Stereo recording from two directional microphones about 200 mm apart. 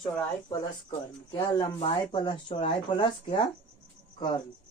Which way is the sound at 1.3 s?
25° left (ahead or behind).